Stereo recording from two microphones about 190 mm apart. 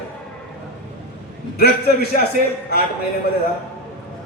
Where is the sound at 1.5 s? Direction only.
55° left (ahead or behind).